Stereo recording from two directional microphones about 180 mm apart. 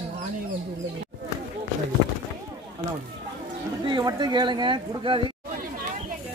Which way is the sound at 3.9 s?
25° right (ahead or behind).